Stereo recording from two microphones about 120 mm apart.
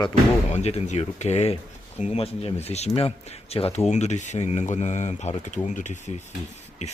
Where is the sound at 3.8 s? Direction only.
70° left (ahead or behind); by 6.0 s 85° left.